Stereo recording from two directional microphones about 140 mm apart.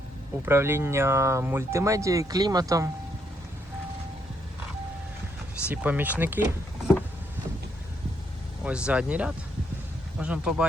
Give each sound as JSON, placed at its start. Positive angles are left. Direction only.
{"t": 0.4, "sound": "speech", "side_deg": -15}
{"t": 5.6, "sound": "speech", "side_deg": -10}
{"t": 8.6, "sound": "speech", "side_deg": -10}